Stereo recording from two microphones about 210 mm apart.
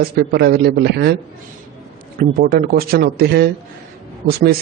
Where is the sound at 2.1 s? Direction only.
45° right (ahead or behind).